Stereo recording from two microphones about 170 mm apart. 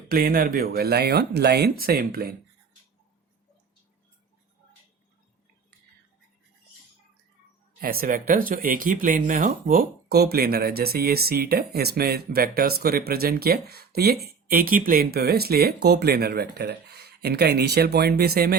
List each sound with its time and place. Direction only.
0.1 s speech: 60° right (ahead or behind)
7.8 s speech: 60° right (ahead or behind)